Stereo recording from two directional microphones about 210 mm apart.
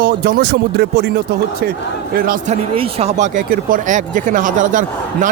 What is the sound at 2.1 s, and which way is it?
Speech, 45° right (ahead or behind).